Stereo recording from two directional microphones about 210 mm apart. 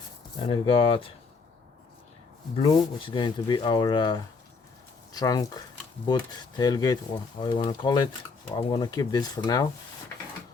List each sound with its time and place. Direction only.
0.3 s speech: 25° left (ahead or behind)
2.6 s speech: 25° left (ahead or behind)